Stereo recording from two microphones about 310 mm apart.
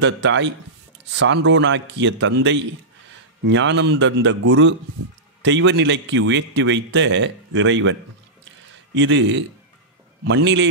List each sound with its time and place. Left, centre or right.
0.0 s a man's voice: right